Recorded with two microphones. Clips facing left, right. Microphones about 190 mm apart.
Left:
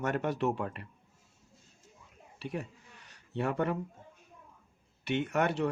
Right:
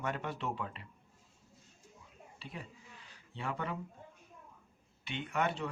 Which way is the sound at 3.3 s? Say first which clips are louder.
Left 8 dB; 60° left (ahead or behind).